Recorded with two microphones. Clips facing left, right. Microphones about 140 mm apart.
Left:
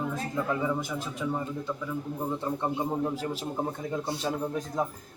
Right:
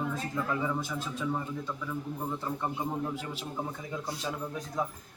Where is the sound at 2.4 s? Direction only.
25° left (ahead or behind).